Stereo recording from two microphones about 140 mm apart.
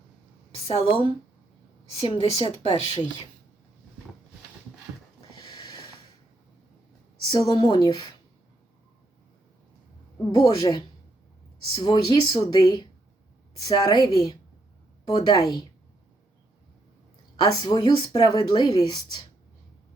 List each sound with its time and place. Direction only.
0.5 s a woman's voice: 45° left (ahead or behind)
5.4 s a sound: 35° left (ahead or behind)
7.3 s speech: 30° left (ahead or behind)
10.3 s speech: 25° left (ahead or behind)
17.4 s speech: 30° left (ahead or behind)